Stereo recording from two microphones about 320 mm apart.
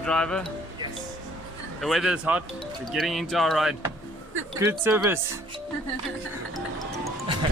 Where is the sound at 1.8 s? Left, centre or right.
Centre.